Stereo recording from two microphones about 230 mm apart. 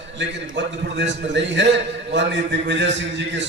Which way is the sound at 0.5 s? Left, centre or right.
Right.